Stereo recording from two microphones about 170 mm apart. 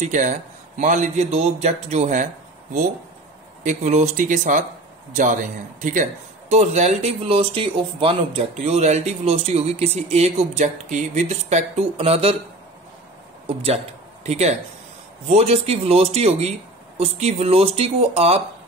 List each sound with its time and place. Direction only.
0.0 s speech: 45° right (ahead or behind)
3.6 s speech: 40° right (ahead or behind)
13.5 s speech: 35° right (ahead or behind)